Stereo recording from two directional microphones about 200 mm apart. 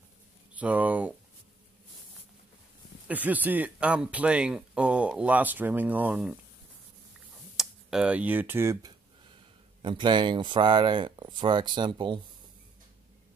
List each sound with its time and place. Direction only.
0.6 s speech: 10° right (ahead or behind)
3.1 s speech: 10° right (ahead or behind)
7.5 s speech: 5° right (ahead or behind)
9.8 s speech: 25° right (ahead or behind)